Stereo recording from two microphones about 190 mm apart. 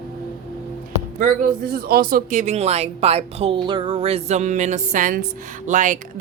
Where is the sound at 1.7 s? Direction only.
50° right (ahead or behind).